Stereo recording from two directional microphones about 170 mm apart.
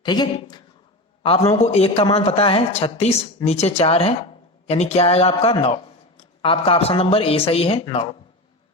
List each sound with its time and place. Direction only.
0.0 s a woman's voice: 25° left (ahead or behind)
1.5 s a man's voice: 40° left (ahead or behind)